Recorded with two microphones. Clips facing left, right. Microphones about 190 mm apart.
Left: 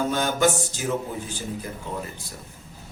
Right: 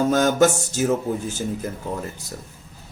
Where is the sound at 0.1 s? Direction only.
45° right (ahead or behind).